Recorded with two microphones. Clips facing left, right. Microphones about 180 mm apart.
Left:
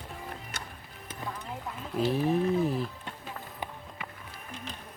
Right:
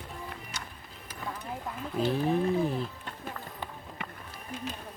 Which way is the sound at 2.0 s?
Centre (ahead or behind).